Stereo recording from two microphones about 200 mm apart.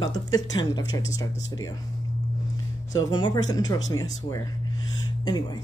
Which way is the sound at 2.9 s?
20° left (ahead or behind).